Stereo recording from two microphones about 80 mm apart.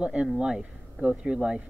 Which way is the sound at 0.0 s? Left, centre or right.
Centre.